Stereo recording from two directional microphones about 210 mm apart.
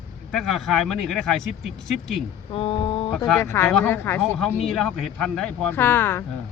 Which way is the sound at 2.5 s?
25° left (ahead or behind).